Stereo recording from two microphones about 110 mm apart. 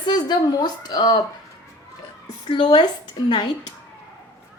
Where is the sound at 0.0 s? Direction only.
40° left (ahead or behind).